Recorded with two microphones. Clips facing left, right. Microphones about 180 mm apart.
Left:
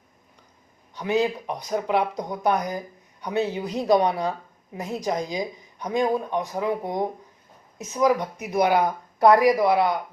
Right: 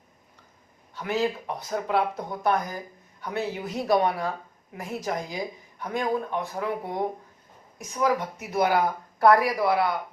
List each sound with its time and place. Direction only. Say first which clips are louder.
0.9 s speech: left 3 dB; 15° left (ahead or behind)